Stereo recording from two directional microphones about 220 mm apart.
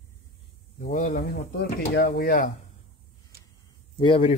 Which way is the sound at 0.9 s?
35° left (ahead or behind).